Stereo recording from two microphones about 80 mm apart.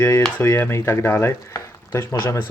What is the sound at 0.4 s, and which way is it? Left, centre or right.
Speech, left.